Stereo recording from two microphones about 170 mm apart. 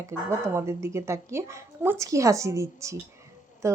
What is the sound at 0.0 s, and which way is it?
A woman's voice, 15° right (ahead or behind).